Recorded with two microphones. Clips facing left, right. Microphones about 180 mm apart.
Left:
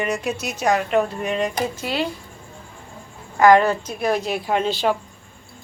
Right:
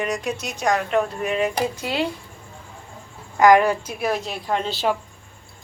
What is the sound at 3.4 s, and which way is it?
Speech, 15° right (ahead or behind).